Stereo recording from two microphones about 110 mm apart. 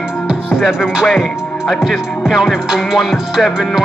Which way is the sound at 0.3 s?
5° right (ahead or behind).